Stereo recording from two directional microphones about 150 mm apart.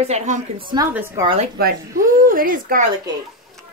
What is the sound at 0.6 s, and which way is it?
Speech, 30° right (ahead or behind).